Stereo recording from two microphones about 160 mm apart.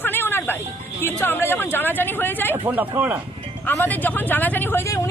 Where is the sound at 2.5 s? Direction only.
10° right (ahead or behind).